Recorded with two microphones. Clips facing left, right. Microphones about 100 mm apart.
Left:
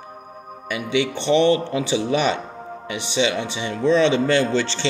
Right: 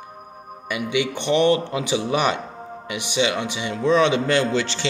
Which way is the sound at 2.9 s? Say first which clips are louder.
Left 1 dB; 10° right (ahead or behind).